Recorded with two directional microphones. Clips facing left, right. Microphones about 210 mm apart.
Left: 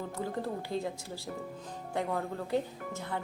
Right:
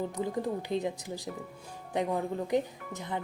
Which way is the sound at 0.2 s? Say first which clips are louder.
Right 1 dB; 20° right (ahead or behind).